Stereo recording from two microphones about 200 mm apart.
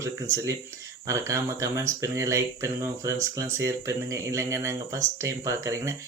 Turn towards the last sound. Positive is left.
turn(degrees=-15)  # may be behind; listen again after turning